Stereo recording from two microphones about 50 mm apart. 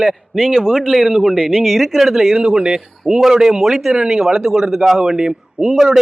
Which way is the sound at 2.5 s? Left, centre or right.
Centre.